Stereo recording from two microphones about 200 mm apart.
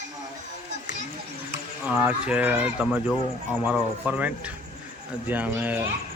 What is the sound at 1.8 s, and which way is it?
Speech, 5° right (ahead or behind).